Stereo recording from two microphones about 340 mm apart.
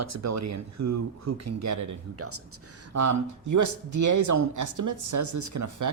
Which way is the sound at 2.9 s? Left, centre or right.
Right.